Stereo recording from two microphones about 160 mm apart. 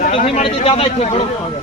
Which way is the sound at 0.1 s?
40° left (ahead or behind).